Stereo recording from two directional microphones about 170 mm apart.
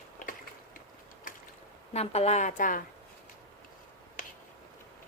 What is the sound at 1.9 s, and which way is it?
Speech, 40° left (ahead or behind).